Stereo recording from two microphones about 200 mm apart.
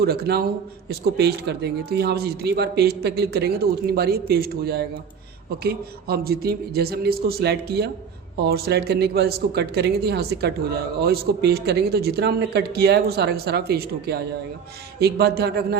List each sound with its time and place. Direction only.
0.0 s a man's voice: 50° right (ahead or behind)